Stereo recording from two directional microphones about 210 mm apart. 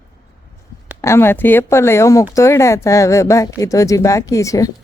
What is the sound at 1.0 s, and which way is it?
Speech, 10° left (ahead or behind).